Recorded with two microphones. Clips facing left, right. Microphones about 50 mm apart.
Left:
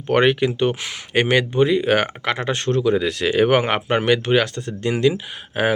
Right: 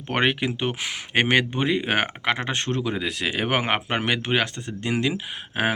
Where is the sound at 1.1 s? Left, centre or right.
Right.